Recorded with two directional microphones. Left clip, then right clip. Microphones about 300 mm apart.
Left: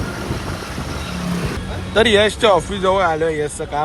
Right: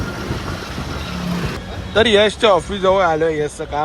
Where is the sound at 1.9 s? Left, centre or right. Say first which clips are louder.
Right 1 dB; centre.